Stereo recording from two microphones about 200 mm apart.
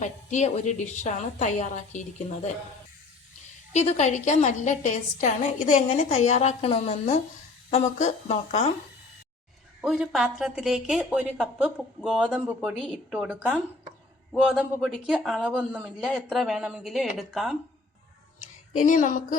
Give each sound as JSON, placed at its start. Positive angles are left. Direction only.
{"t": 0.0, "sound": "a woman's voice", "side_deg": 35}
{"t": 3.7, "sound": "a woman's voice", "side_deg": 35}
{"t": 9.8, "sound": "speech", "side_deg": 0}
{"t": 18.7, "sound": "a woman's voice", "side_deg": 40}